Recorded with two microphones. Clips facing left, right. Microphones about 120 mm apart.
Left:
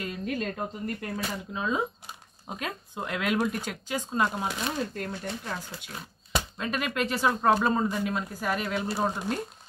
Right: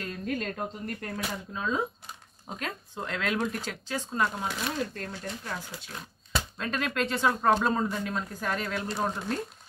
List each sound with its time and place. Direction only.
0.0 s speech: 5° left (ahead or behind)
6.3 s speech: 10° left (ahead or behind)